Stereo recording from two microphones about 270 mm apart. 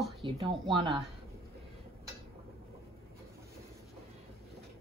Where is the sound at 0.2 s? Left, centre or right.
Centre.